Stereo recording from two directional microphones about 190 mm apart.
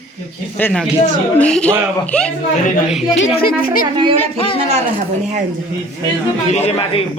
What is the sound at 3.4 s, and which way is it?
Speech, 50° left (ahead or behind).